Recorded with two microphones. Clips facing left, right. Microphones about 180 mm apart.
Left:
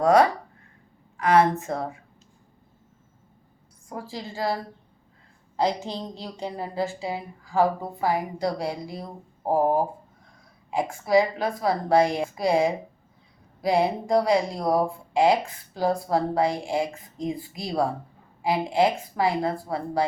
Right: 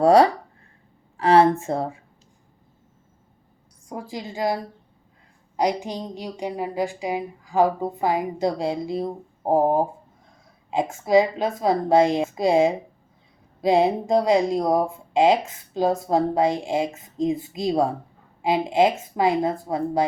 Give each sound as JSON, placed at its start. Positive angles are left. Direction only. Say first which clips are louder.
{"t": 0.0, "sound": "speech", "louder": "right 3 dB", "side_deg": -30}
{"t": 3.8, "sound": "a woman's voice", "louder": "right 2 dB", "side_deg": -20}